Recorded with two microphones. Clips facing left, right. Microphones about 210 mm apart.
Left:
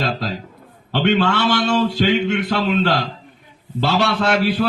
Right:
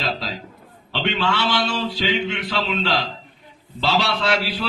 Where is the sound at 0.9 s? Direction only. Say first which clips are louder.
Left 6 dB; 50° left (ahead or behind).